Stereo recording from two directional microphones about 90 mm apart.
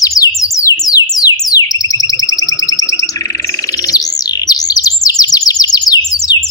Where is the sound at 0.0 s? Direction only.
40° left (ahead or behind).